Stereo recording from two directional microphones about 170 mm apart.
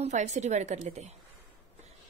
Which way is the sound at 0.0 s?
45° right (ahead or behind).